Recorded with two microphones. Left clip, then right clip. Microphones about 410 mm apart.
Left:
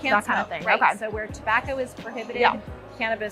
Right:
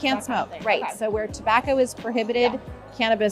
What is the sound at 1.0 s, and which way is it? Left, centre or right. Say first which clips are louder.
Speech: right 5 dB; right.